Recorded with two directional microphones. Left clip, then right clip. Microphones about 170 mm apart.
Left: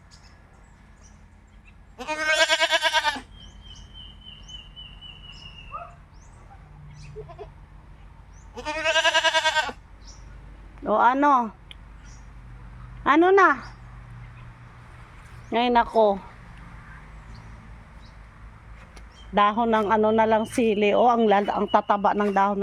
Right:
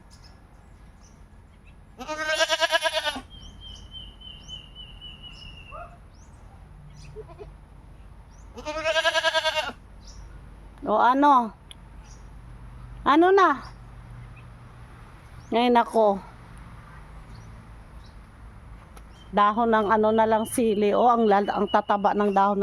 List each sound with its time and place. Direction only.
2.0 s goat: 5° left (ahead or behind)
3.0 s goat: 35° left (ahead or behind)
8.5 s goat: 10° left (ahead or behind)
10.8 s speech: 10° right (ahead or behind)
13.1 s speech: 10° right (ahead or behind)
15.4 s speech: 25° right (ahead or behind)
19.3 s a man's voice: 15° right (ahead or behind)